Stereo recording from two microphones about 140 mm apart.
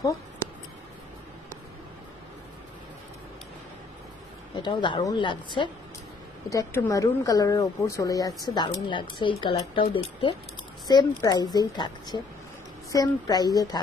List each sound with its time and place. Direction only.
0.4 s a sound: 20° left (ahead or behind)
4.6 s a woman's voice: 35° left (ahead or behind)
6.5 s a woman's voice: 25° left (ahead or behind)